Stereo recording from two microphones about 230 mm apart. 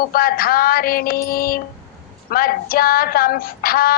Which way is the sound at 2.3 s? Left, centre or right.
Left.